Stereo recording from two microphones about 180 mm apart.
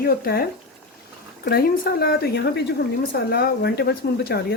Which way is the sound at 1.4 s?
55° left (ahead or behind).